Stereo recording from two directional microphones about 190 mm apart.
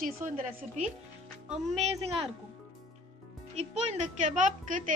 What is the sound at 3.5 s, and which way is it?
A woman's voice, 35° right (ahead or behind).